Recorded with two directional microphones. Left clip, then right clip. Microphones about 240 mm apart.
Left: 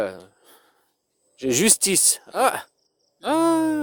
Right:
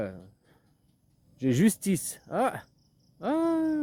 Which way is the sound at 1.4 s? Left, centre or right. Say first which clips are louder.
Left 7 dB; left.